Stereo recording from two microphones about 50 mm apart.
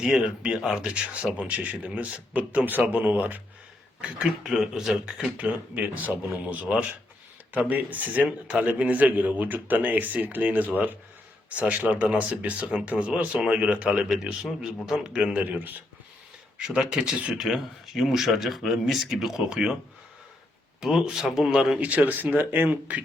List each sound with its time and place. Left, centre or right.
0.0 s speech: centre; by 3.4 s right
4.0 s a man's voice: centre
5.4 s speech: right
7.7 s speech: right
8.3 s a man's voice: right
15.4 s speech: right
16.6 s a man's voice: centre
20.8 s a man's voice: centre
21.8 s speech: right